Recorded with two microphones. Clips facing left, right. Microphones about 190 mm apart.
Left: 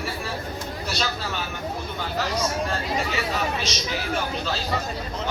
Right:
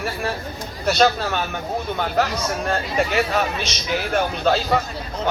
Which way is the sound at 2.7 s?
60° right (ahead or behind).